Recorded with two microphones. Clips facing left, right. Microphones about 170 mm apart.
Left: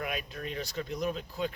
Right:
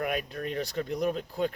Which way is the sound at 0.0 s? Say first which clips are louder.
Right 5 dB; 55° right (ahead or behind).